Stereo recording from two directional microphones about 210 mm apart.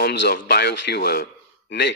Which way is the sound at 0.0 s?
50° left (ahead or behind).